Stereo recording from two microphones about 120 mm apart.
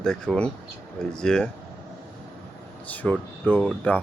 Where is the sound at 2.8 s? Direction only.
15° left (ahead or behind).